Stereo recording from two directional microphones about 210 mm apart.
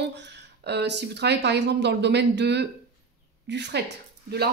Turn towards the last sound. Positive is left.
turn(degrees=-50)  # may be behind; listen again after turning